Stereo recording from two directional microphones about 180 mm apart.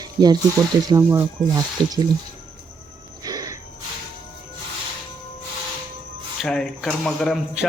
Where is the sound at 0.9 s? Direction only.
15° right (ahead or behind).